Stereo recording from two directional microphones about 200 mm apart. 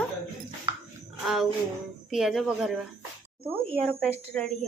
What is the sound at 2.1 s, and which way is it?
Speech, centre (ahead or behind).